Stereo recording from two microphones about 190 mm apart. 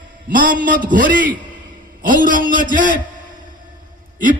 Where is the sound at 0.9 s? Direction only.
45° right (ahead or behind).